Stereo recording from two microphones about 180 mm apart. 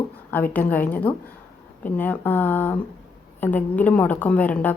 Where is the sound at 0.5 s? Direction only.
10° left (ahead or behind).